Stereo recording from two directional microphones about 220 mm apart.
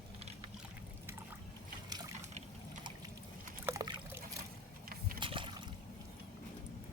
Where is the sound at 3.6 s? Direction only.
10° right (ahead or behind).